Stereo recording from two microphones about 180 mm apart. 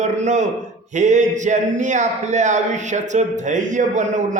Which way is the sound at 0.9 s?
40° right (ahead or behind).